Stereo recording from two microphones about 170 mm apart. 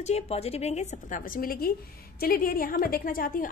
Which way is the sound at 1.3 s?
60° left (ahead or behind).